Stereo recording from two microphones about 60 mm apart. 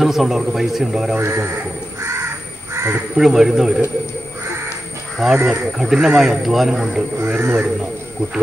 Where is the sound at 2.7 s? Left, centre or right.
Right.